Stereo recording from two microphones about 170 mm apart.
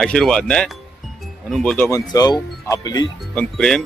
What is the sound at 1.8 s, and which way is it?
Speech, 20° left (ahead or behind).